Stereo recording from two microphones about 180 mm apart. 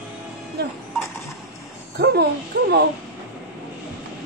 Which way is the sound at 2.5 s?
70° right (ahead or behind).